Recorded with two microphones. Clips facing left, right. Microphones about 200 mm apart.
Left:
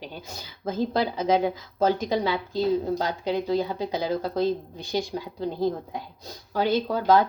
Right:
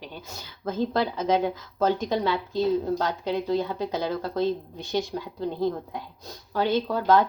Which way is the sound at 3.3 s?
10° left (ahead or behind).